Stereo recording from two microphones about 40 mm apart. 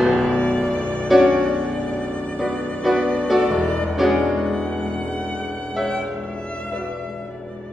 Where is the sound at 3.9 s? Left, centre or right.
Centre.